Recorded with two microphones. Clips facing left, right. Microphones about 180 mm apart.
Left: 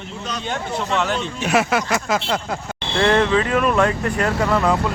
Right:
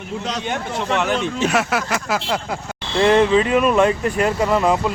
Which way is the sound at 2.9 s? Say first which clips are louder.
Right 3 dB; 15° right (ahead or behind).